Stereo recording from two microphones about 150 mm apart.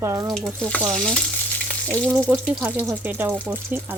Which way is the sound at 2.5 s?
5° right (ahead or behind).